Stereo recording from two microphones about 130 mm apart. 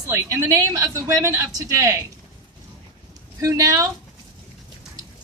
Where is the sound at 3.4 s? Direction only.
25° right (ahead or behind).